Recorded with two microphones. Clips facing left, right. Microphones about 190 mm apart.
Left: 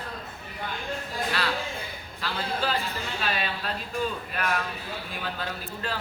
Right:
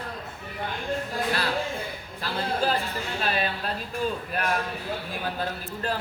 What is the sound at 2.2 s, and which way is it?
Speech, 45° right (ahead or behind).